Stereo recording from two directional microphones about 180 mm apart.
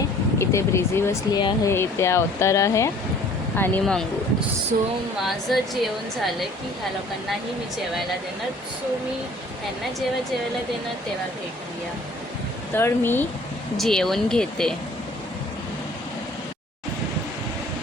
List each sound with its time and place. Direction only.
0.3 s speech: 15° left (ahead or behind)
1.4 s speech: 25° left (ahead or behind)
1.7 s speech: 15° left (ahead or behind)
3.6 s speech: 5° left (ahead or behind)
12.7 s speech: 10° left (ahead or behind)
13.7 s speech: centre (ahead or behind)